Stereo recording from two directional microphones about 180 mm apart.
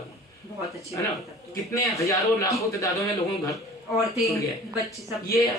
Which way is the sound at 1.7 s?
15° left (ahead or behind).